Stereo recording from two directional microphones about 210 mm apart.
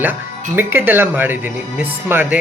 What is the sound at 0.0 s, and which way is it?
Speech, 10° right (ahead or behind).